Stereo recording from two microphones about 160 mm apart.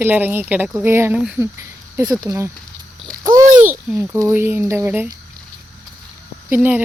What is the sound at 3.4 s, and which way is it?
Babbling, 55° right (ahead or behind).